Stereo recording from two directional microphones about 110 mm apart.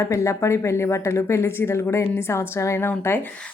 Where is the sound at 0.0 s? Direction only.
25° left (ahead or behind).